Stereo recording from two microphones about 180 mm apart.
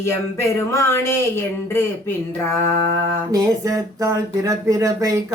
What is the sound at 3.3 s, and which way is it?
Speech, 20° right (ahead or behind).